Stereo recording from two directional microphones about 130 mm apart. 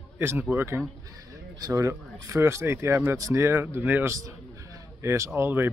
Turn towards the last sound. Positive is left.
turn(degrees=-15)  # may be behind; listen again after turning